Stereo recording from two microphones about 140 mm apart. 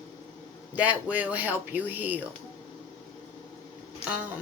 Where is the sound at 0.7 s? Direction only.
10° right (ahead or behind).